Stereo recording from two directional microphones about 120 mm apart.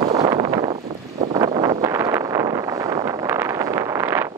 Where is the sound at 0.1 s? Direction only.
35° right (ahead or behind).